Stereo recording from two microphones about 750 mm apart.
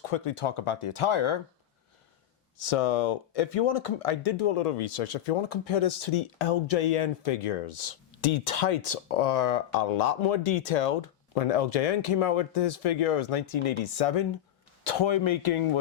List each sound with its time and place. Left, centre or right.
0.1 s speech: left
2.6 s speech: left
14.8 s speech: left